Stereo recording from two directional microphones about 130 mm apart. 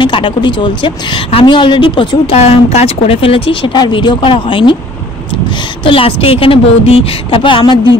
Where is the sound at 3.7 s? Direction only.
35° left (ahead or behind).